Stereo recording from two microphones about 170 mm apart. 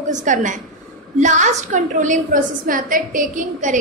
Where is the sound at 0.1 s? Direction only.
45° right (ahead or behind).